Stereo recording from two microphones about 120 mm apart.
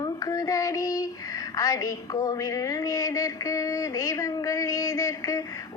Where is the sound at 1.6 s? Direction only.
30° left (ahead or behind).